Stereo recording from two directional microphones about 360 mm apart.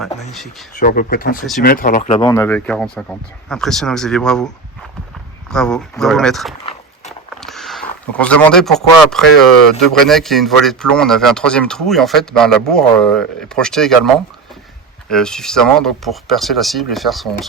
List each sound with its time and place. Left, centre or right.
0.0 s a man's voice: centre
0.8 s a man's voice: left; by 4.4 s centre
5.5 s a man's voice: centre
15.1 s a man's voice: centre